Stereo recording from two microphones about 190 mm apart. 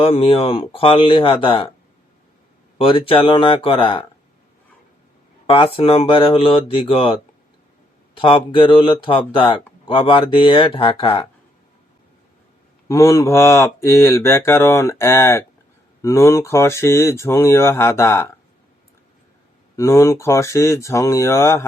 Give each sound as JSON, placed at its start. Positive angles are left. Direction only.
{"t": 0.0, "sound": "speech", "side_deg": 30}
{"t": 2.7, "sound": "speech", "side_deg": 25}
{"t": 5.5, "sound": "speech", "side_deg": 30}
{"t": 12.9, "sound": "speech", "side_deg": 15}
{"t": 19.7, "sound": "speech", "side_deg": 15}